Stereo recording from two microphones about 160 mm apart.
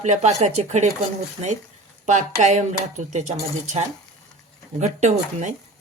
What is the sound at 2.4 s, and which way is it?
Speech, 45° right (ahead or behind).